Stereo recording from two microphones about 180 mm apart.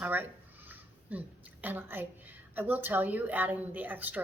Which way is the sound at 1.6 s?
10° right (ahead or behind).